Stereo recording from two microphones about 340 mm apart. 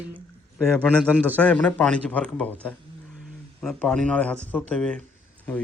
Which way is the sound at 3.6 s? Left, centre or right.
Centre.